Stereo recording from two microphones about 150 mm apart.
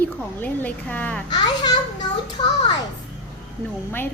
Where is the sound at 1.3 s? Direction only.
30° left (ahead or behind).